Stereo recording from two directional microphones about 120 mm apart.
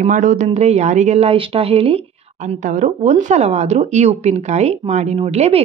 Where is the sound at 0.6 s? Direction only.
65° right (ahead or behind).